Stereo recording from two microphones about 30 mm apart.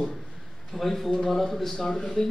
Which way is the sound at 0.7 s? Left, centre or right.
Centre.